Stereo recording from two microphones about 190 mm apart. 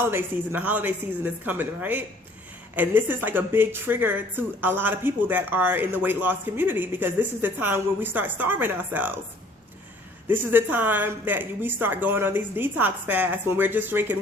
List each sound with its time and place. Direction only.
0.1 s a woman's voice: 10° right (ahead or behind)
10.2 s a woman's voice: 10° right (ahead or behind)